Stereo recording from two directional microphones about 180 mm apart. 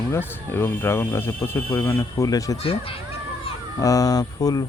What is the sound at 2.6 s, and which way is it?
Speech, 30° left (ahead or behind).